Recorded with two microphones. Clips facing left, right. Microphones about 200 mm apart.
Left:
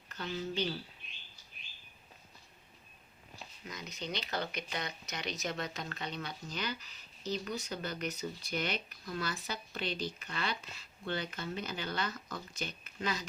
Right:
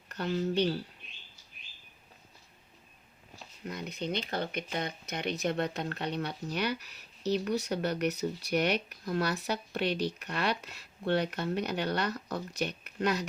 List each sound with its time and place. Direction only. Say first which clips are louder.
0.1 s speech: right 7 dB; 60° right (ahead or behind)
3.6 s speech: right 7 dB; 60° right (ahead or behind)